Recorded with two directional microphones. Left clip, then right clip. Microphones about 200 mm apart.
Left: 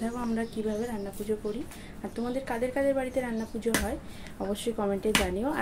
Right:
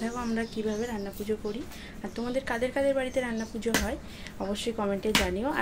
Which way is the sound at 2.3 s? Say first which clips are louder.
Right 2 dB; centre (ahead or behind).